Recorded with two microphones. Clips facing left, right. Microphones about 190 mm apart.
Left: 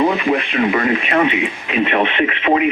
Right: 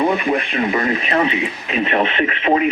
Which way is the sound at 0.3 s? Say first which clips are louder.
Left 2 dB; 40° right (ahead or behind).